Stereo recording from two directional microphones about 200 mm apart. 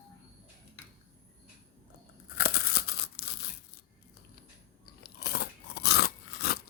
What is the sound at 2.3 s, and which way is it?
Tearing, 55° left (ahead or behind).